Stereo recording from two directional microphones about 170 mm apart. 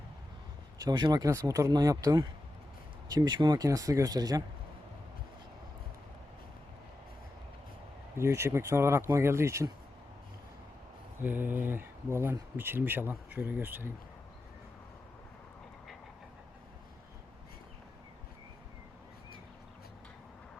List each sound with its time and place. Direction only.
0.9 s speech: 25° right (ahead or behind)
8.1 s speech: 15° right (ahead or behind)
11.2 s speech: 10° right (ahead or behind)